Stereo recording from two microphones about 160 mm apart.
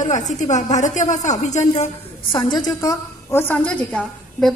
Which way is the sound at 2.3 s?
30° left (ahead or behind).